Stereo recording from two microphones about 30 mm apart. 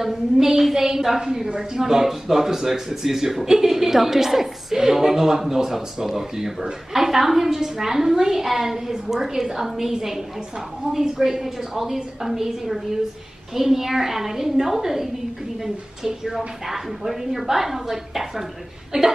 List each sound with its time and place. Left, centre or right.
0.0 s a man's voice: centre
18.9 s speech: right